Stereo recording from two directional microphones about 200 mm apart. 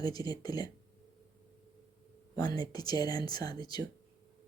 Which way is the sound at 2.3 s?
20° left (ahead or behind).